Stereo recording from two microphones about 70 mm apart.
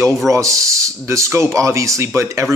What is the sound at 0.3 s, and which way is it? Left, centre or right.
Speech, right.